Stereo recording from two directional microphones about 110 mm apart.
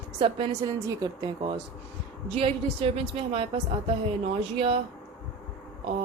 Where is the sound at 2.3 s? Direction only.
55° right (ahead or behind).